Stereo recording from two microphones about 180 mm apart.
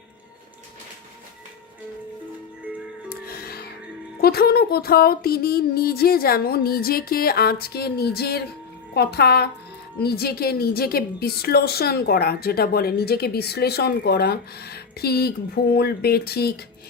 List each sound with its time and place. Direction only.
3.2 s music: 55° left (ahead or behind)
4.2 s a woman's voice: 60° left (ahead or behind)